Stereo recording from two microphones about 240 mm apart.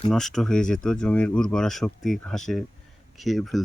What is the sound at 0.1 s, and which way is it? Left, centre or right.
Speech, centre.